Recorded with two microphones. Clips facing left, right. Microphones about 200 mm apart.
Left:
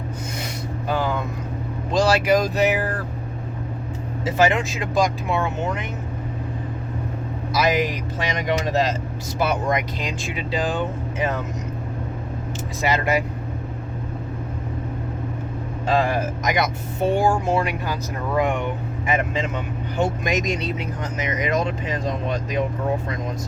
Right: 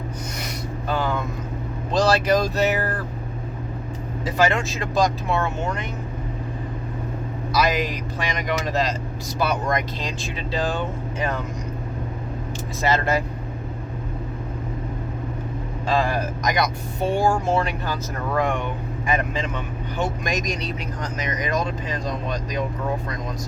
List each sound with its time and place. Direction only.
0.9 s vehicle: 15° left (ahead or behind)
2.0 s speech: 10° left (ahead or behind)
4.4 s speech: 20° left (ahead or behind)
7.5 s speech: 20° left (ahead or behind)
12.8 s speech: 15° left (ahead or behind)
15.9 s speech: 20° left (ahead or behind)